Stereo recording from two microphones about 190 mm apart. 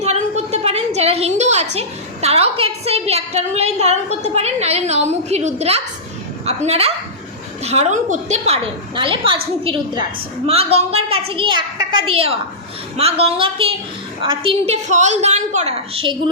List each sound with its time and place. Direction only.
0.0 s a sound: 35° right (ahead or behind)
2.2 s a woman's voice: 30° right (ahead or behind)
9.0 s a child's voice: 25° right (ahead or behind)